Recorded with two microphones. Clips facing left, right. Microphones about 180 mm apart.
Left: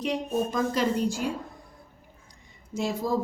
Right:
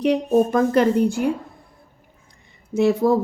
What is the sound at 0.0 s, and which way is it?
A woman's voice, 65° right (ahead or behind).